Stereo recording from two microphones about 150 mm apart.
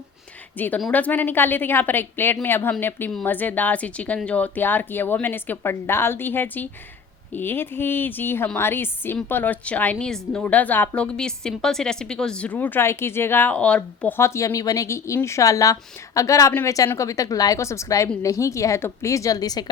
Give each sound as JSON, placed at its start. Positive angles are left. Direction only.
{"t": 0.5, "sound": "a woman's voice", "side_deg": 10}